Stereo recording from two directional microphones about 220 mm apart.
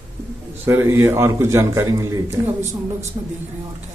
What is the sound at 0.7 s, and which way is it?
A man's voice, 10° right (ahead or behind).